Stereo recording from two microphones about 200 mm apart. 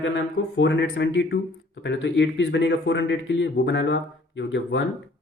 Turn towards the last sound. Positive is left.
turn(degrees=65)  # may be behind; listen again after turning